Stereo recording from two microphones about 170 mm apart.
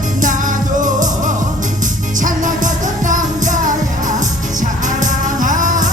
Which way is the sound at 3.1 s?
50° right (ahead or behind).